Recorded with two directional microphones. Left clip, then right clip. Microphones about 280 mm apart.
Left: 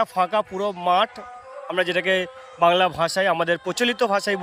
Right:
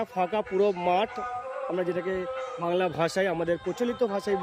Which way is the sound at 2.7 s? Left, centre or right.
Centre.